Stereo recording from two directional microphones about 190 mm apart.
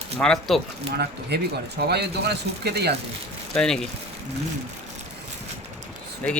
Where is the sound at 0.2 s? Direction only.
Centre (ahead or behind).